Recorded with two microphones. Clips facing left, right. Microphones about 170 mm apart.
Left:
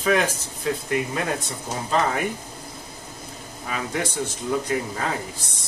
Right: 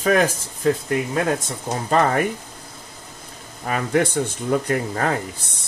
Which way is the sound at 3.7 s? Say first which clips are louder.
Right 7 dB; 55° right (ahead or behind).